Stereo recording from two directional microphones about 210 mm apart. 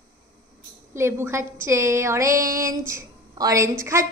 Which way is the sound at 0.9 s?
10° right (ahead or behind).